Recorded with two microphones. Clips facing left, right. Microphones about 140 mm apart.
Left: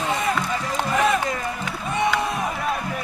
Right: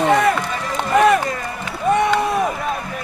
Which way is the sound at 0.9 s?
65° right (ahead or behind).